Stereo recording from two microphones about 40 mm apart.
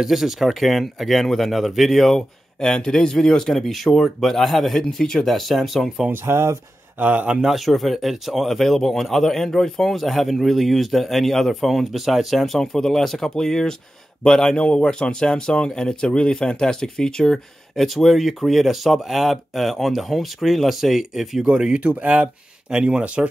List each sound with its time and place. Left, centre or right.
0.0 s speech: centre
2.6 s speech: centre
7.0 s a man's voice: right
7.4 s speech: centre
12.5 s a man's voice: centre
21.7 s speech: right